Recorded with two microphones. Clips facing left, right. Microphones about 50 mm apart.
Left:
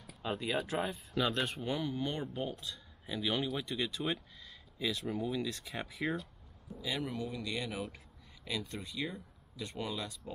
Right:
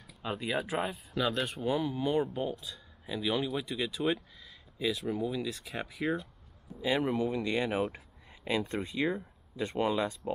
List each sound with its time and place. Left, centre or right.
0.2 s speech: centre
6.8 s speech: right